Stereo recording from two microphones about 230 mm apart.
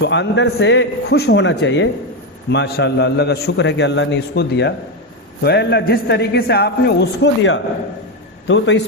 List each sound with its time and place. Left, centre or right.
0.0 s a man's voice: left